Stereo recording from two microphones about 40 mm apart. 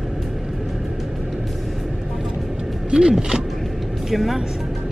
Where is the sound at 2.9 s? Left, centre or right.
Right.